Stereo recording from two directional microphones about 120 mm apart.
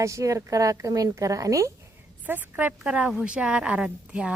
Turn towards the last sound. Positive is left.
turn(degrees=-10)  # may be behind; listen again after turning